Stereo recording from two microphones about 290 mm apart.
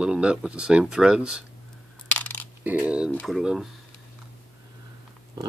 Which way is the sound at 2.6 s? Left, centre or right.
Centre.